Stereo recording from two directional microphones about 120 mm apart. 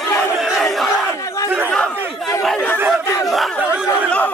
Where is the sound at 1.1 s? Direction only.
25° left (ahead or behind).